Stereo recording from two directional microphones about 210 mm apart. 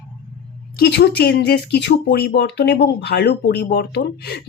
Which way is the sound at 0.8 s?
55° left (ahead or behind).